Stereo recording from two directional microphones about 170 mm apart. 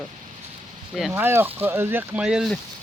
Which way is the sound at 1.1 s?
15° right (ahead or behind).